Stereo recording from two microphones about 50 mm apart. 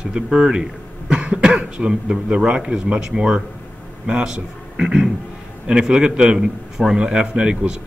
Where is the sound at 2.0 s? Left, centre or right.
Centre.